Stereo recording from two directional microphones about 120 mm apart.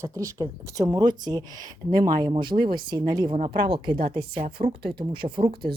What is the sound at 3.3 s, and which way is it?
Speech, 60° right (ahead or behind).